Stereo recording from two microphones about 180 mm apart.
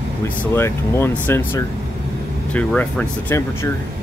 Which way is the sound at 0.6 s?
15° left (ahead or behind).